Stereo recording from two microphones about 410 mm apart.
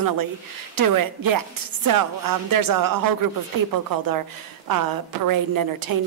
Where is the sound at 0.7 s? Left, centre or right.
Right.